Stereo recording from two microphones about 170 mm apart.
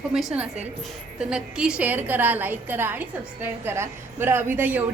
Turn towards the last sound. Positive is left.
turn(degrees=-10)  # may be behind; listen again after turning